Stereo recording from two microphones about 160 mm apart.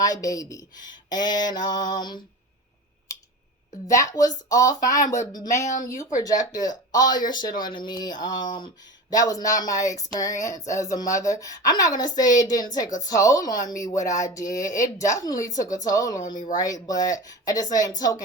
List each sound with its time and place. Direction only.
0.0 s mantra: 20° left (ahead or behind)
3.9 s mantra: 20° left (ahead or behind)
5.6 s speech: 50° left (ahead or behind)
6.5 s mantra: 25° left (ahead or behind)
16.2 s speech: 55° left (ahead or behind)
16.6 s mantra: 20° left (ahead or behind)